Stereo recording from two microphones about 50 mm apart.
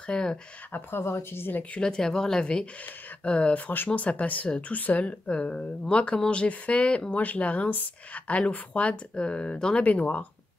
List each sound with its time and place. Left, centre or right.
0.0 s speech: centre
0.7 s speech: left
1.8 s speech: centre
9.8 s speech: left